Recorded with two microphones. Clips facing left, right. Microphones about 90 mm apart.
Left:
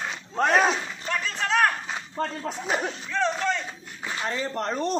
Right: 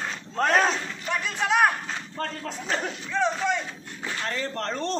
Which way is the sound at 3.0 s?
10° right (ahead or behind).